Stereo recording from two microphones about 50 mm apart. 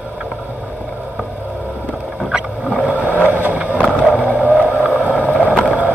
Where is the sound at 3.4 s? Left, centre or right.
Right.